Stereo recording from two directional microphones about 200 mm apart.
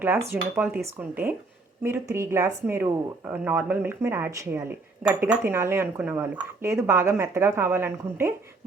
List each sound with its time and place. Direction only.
0.0 s speech: 10° right (ahead or behind)